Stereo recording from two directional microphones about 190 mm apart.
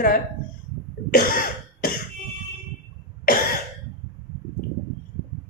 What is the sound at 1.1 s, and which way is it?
Cough, 50° left (ahead or behind).